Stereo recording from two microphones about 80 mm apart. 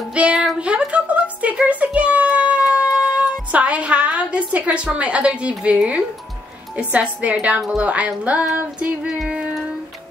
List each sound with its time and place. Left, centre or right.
0.1 s a sound: centre
0.6 s music: centre
6.8 s a woman's voice: centre
9.0 s child singing: centre